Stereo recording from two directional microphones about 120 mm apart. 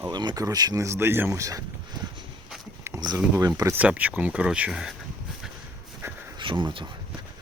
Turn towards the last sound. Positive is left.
turn(degrees=-45)  # may be behind; listen again after turning